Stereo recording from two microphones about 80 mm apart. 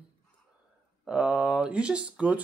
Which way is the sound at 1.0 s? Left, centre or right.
Centre.